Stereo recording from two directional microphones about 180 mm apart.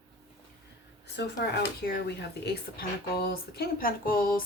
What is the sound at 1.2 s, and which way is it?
Speech, 70° left (ahead or behind).